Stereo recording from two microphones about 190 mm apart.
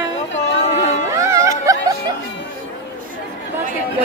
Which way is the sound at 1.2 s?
15° right (ahead or behind).